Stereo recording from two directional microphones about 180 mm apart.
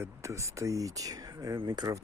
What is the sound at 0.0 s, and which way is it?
Speech, 15° right (ahead or behind).